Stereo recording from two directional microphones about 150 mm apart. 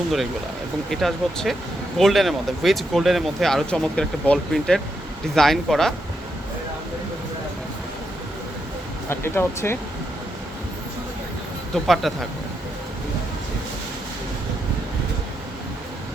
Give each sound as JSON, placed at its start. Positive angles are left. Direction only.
{"t": 0.9, "sound": "speech", "side_deg": 0}
{"t": 9.0, "sound": "speech", "side_deg": 15}
{"t": 11.7, "sound": "speech", "side_deg": 0}